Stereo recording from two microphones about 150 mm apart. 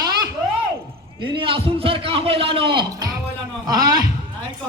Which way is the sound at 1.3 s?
35° right (ahead or behind).